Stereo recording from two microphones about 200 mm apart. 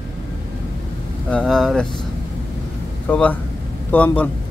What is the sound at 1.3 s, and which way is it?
Speech, 5° left (ahead or behind).